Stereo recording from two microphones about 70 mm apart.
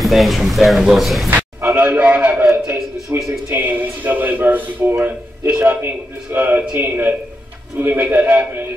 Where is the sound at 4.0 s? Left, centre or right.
Right.